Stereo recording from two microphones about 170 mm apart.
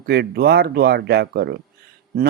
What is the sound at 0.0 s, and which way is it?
Speech, 70° right (ahead or behind).